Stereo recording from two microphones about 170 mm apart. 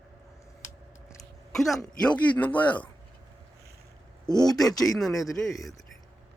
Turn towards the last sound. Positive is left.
turn(degrees=0)  # may be behind; listen again after turning